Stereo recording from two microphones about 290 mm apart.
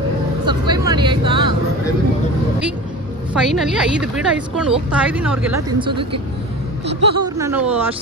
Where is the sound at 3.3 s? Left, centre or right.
Centre.